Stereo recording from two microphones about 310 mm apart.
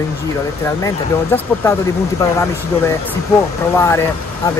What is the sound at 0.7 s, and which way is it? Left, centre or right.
Speech, centre.